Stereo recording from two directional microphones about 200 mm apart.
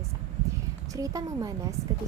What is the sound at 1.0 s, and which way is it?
Speech, 15° right (ahead or behind).